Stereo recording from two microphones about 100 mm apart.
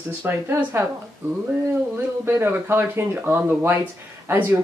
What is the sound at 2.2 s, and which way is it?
Speech, 25° right (ahead or behind).